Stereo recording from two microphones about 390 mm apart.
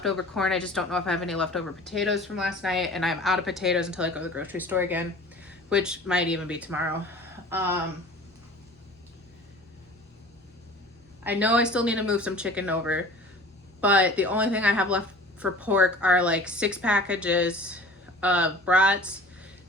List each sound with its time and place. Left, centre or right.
0.0 s a woman's voice: centre
11.2 s a woman's voice: centre